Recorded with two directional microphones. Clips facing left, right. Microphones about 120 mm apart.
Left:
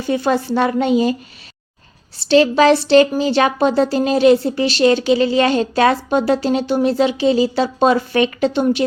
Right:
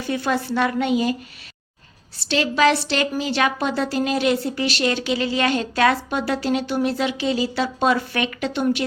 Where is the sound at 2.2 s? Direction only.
30° left (ahead or behind).